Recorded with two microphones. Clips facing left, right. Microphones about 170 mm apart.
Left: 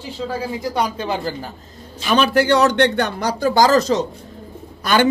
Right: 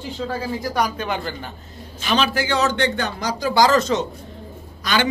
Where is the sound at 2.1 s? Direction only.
60° left (ahead or behind); by 4.1 s 35° left (ahead or behind).